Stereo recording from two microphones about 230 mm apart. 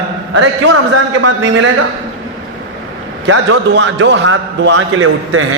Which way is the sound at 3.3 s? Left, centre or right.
Right.